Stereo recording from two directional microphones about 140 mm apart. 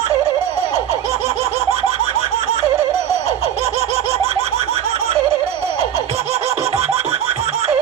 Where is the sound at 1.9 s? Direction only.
45° right (ahead or behind).